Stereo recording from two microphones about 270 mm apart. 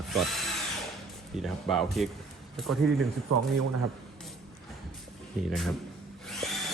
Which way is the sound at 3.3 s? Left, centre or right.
Right.